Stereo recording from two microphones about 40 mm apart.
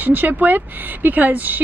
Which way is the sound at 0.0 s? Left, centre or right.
Right.